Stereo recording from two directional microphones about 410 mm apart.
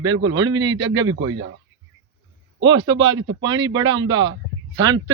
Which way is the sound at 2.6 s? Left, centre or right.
Centre.